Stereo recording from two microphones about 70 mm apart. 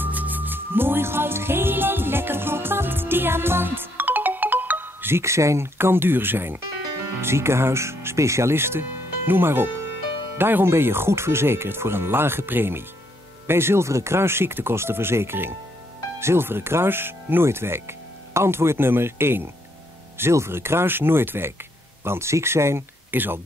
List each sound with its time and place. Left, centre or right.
0.0 s music: right
7.2 s speech: right